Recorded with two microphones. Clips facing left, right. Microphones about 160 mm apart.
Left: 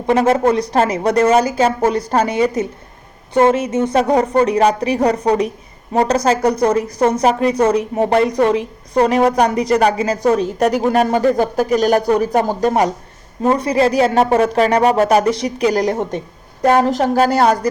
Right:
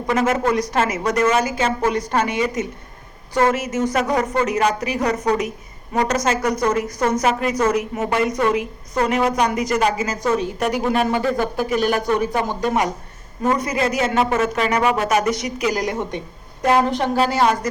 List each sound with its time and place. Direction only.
0.1 s a woman's voice: 30° left (ahead or behind)